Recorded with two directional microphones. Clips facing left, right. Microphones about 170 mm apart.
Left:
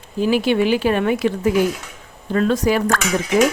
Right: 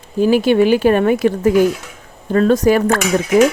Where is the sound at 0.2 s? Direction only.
45° right (ahead or behind).